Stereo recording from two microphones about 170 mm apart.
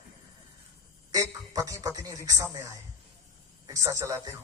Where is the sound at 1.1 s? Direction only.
20° right (ahead or behind).